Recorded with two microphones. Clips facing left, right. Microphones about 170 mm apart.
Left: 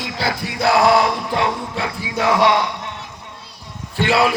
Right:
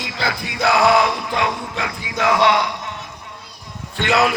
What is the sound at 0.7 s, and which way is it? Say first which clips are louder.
Music: left 1 dB; 40° left (ahead or behind).